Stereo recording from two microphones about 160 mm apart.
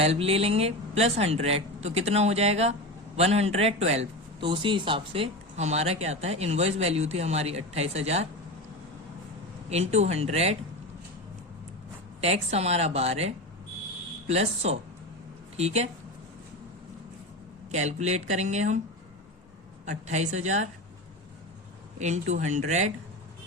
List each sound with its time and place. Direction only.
0.0 s speech: 40° right (ahead or behind)
9.6 s speech: 45° right (ahead or behind)
12.2 s speech: 40° right (ahead or behind)
17.7 s speech: 45° right (ahead or behind)
19.8 s speech: 45° right (ahead or behind)
21.9 s speech: 45° right (ahead or behind)